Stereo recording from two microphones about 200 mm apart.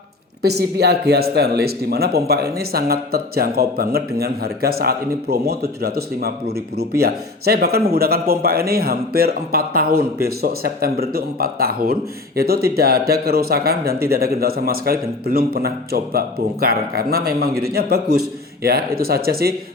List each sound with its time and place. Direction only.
0.4 s speech: 55° right (ahead or behind)